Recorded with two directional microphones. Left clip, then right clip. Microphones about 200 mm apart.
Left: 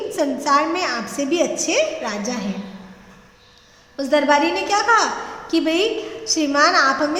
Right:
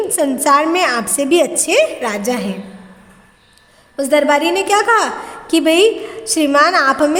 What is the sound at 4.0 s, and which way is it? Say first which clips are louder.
A woman's voice: right 3 dB; 45° right (ahead or behind).